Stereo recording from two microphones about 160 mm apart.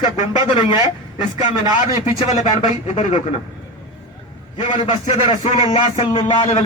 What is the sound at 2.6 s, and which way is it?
Speech, 45° left (ahead or behind).